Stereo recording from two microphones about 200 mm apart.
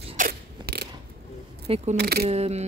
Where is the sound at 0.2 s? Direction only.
50° right (ahead or behind).